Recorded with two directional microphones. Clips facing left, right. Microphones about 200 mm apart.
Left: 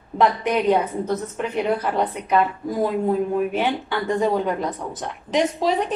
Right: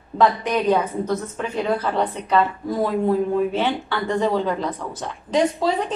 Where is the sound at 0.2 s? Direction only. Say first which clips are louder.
Even; 20° left (ahead or behind).